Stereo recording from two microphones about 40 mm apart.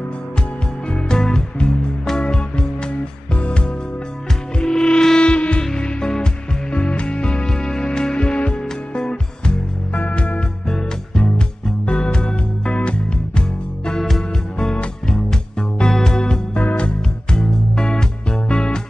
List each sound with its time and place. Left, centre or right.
0.9 s music: centre
6.7 s music: left
9.9 s music: left; by 16.3 s centre
16.5 s music: left